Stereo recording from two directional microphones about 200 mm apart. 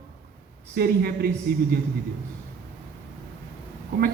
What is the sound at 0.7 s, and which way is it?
Speech, 50° right (ahead or behind).